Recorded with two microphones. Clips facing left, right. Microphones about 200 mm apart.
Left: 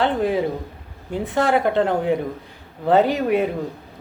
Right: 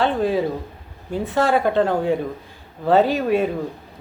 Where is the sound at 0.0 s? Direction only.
20° left (ahead or behind).